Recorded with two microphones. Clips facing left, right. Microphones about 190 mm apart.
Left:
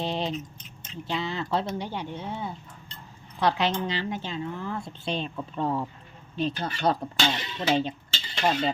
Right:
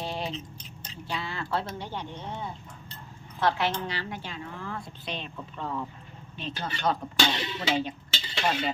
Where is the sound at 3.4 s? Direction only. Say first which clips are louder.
Left 2 dB; 20° left (ahead or behind); by 7.0 s 35° left (ahead or behind).